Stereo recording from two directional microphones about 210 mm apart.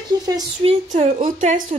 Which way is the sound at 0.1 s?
20° right (ahead or behind).